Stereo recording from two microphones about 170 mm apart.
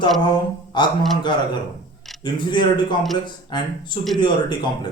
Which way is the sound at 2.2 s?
25° left (ahead or behind).